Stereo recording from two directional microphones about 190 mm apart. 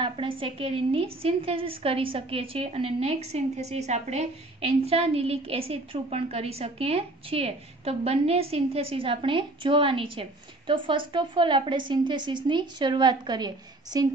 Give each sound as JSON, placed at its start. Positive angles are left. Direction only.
{"t": 0.0, "sound": "a woman's voice", "side_deg": -25}